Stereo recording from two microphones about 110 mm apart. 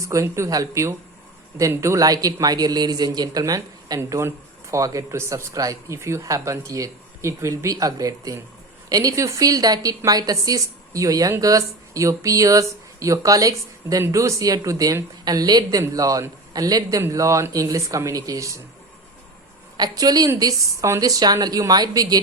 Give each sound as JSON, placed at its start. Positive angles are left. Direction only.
{"t": 0.0, "sound": "speech", "side_deg": -30}
{"t": 19.7, "sound": "speech", "side_deg": -35}